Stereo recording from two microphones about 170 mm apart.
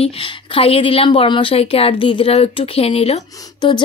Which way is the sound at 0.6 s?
35° left (ahead or behind).